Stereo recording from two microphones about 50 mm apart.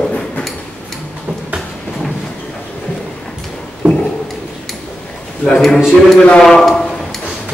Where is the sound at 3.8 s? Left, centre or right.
Right.